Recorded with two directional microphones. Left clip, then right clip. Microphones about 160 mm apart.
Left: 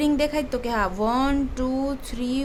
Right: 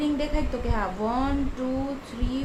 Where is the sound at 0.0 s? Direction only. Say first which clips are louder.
Left 5 dB; 60° left (ahead or behind).